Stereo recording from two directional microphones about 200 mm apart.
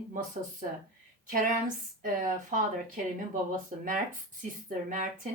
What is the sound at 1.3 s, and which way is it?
A woman's voice, 40° right (ahead or behind).